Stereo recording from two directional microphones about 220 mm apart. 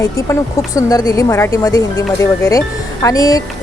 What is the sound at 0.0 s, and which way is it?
Speech, 15° left (ahead or behind).